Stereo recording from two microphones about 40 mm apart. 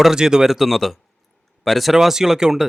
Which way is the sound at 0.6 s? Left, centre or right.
Centre.